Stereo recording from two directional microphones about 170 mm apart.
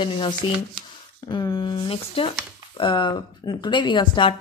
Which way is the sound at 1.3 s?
25° left (ahead or behind).